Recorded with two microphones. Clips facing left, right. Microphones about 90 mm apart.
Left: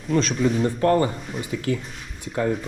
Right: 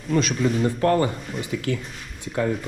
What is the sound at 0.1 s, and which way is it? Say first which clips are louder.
Speech: left 1 dB; centre (ahead or behind).